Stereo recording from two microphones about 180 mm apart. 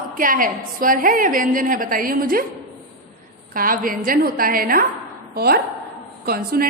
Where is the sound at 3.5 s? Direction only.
50° right (ahead or behind).